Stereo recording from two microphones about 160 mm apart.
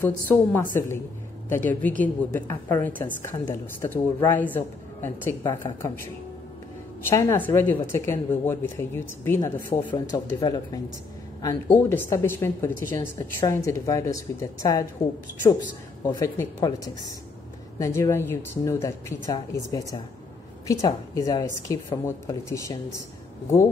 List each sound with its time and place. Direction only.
0.0 s a woman's voice: 10° left (ahead or behind)
7.1 s speech: 15° left (ahead or behind)
9.9 s speech: 25° left (ahead or behind)
11.4 s speech: 15° left (ahead or behind)
16.1 s speech: 20° left (ahead or behind)
20.6 s speech: 20° left (ahead or behind)